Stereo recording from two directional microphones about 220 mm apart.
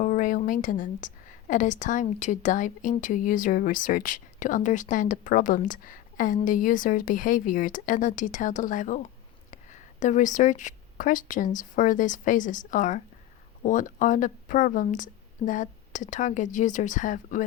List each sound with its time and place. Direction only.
0.0 s a woman's voice: 35° left (ahead or behind)
10.0 s a woman's voice: 35° left (ahead or behind)